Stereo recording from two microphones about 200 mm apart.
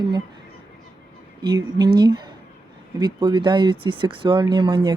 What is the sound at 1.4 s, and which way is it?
Speech, 20° right (ahead or behind).